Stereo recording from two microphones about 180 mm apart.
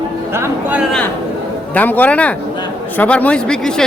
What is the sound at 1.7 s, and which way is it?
A man's voice, 10° left (ahead or behind).